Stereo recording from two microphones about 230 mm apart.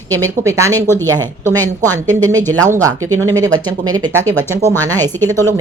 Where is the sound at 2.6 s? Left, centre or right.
Centre.